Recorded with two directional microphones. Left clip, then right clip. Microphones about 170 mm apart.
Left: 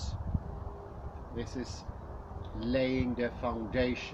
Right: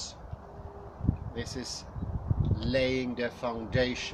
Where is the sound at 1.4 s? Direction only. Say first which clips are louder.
Right 2 dB; 15° right (ahead or behind).